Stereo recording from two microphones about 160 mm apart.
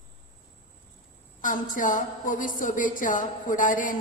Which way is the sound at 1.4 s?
55° left (ahead or behind).